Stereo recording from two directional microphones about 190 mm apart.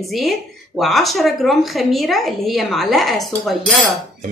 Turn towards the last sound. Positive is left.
turn(degrees=0)  # may be behind; listen again after turning